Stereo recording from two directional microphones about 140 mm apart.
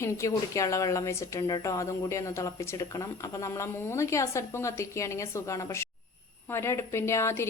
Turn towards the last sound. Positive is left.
turn(degrees=20)  # may be behind; listen again after turning